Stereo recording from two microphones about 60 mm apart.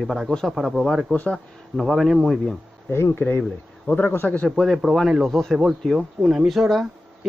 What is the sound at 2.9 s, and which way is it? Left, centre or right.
A man's voice, left.